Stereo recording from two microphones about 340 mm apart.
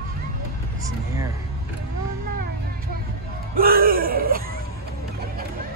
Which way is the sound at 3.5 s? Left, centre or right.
Right.